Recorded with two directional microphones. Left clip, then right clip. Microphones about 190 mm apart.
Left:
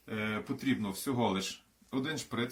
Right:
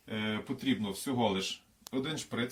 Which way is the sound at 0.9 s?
20° right (ahead or behind).